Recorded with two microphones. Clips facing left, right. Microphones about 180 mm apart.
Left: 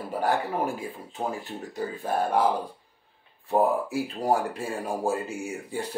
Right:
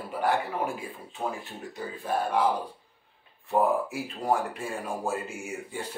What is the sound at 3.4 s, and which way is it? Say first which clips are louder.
Speech: left 1 dB; 35° left (ahead or behind).